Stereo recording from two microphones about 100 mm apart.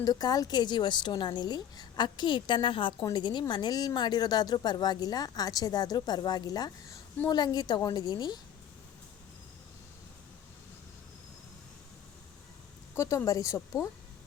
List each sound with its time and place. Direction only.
0.0 s speech: 40° left (ahead or behind)
13.0 s a woman's voice: 30° left (ahead or behind)